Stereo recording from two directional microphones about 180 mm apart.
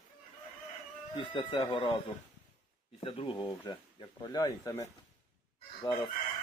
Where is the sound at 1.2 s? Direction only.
25° left (ahead or behind).